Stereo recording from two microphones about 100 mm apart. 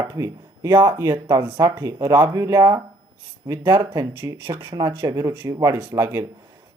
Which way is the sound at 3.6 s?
45° right (ahead or behind).